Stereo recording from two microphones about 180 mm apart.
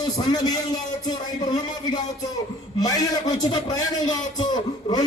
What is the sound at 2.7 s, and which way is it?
A man's voice, 20° left (ahead or behind).